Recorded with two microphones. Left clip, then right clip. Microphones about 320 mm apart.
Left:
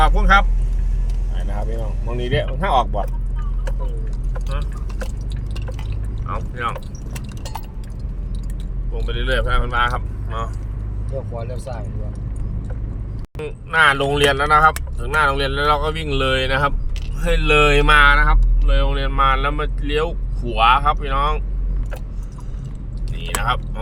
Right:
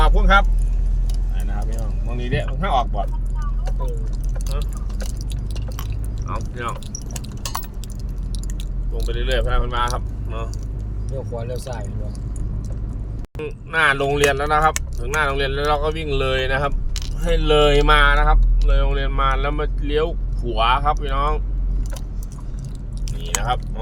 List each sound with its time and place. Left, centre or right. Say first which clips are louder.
0.0 s vehicle: left 3 dB; centre
2.0 s speech: left 4 dB; left
6.2 s speech: left 3 dB; centre
9.0 s speech: left 2 dB; centre
11.3 s speech: right 1 dB; right
13.4 s speech: left 3 dB; centre